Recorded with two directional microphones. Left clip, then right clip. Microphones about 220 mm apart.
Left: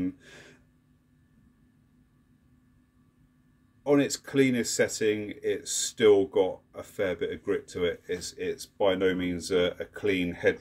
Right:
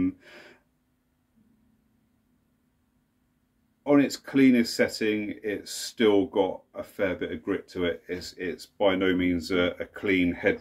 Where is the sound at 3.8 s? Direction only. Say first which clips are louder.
Right 2 dB; 40° left (ahead or behind).